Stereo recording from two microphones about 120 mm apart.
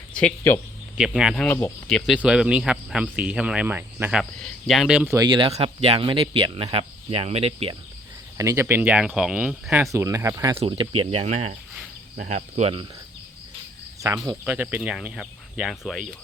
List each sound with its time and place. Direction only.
0.1 s a sound: 10° left (ahead or behind)
0.9 s speech: 5° right (ahead or behind)
4.1 s speech: 5° left (ahead or behind)
5.1 s speech: 35° right (ahead or behind)
5.5 s speech: 60° right (ahead or behind)
8.4 s speech: 25° right (ahead or behind)
8.6 s speech: 15° right (ahead or behind)
9.8 s speech: 25° right (ahead or behind)
10.7 s speech: 45° right (ahead or behind); by 12.7 s 75° right (ahead or behind)
14.3 s speech: 15° right (ahead or behind)
14.8 s speech: centre (ahead or behind)